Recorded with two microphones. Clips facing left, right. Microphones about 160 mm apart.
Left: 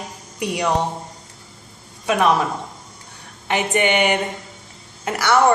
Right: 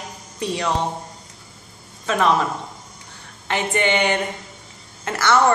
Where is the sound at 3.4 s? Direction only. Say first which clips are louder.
Left 2 dB; 15° left (ahead or behind).